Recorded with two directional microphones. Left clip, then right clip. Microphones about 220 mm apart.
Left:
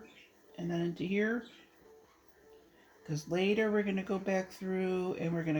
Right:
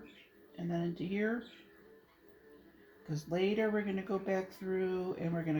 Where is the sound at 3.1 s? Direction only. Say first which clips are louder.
Left 2 dB; 30° left (ahead or behind).